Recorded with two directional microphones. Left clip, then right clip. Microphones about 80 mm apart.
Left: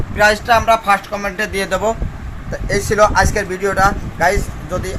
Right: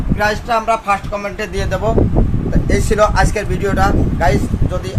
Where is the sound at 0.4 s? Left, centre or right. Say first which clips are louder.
Left 3 dB; left.